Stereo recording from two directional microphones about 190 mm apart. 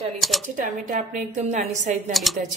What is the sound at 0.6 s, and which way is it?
A woman's voice, 45° right (ahead or behind).